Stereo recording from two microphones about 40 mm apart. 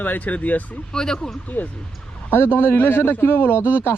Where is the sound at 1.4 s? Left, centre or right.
Left.